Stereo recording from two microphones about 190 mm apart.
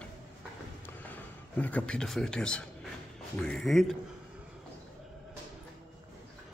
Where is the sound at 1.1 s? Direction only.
10° left (ahead or behind).